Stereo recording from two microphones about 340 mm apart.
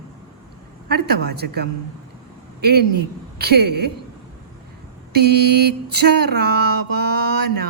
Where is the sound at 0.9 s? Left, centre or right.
Right.